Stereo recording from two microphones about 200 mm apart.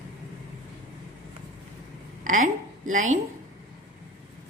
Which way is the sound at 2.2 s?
40° right (ahead or behind).